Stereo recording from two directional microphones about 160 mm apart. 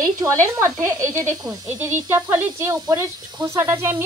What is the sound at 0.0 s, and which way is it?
Speech, 20° right (ahead or behind).